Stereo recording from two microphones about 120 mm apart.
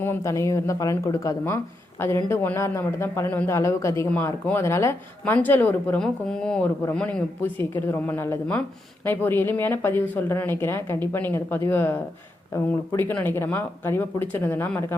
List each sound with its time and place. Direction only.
0.0 s speech: 20° left (ahead or behind)
6.0 s speech: 5° left (ahead or behind)
7.6 s speech: 20° left (ahead or behind)
13.0 s speech: 15° left (ahead or behind)